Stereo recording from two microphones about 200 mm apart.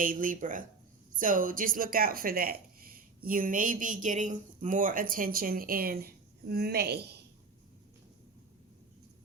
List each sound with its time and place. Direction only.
0.0 s speech: 40° right (ahead or behind)